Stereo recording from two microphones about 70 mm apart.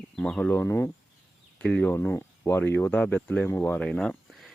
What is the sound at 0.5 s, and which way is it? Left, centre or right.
Speech, left.